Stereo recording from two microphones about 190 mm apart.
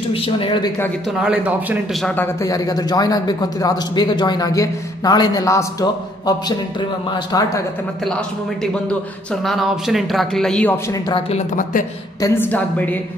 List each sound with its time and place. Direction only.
0.1 s a man's voice: 30° left (ahead or behind)
1.1 s a man's voice: 5° right (ahead or behind)
2.0 s a man's voice: 10° left (ahead or behind)
8.7 s a man's voice: 5° left (ahead or behind)
10.9 s a man's voice: 25° left (ahead or behind)
12.2 s a woman's voice: 10° left (ahead or behind)